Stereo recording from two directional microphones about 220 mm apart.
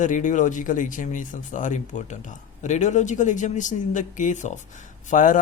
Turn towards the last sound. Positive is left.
turn(degrees=35)  # may be behind; listen again after turning